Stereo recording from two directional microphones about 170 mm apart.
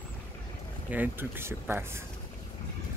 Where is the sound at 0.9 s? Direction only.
10° right (ahead or behind).